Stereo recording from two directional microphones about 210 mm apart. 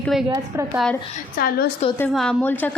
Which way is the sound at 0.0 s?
Centre (ahead or behind).